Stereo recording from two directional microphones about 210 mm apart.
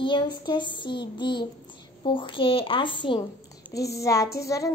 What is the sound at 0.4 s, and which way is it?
A child's voice, 20° left (ahead or behind).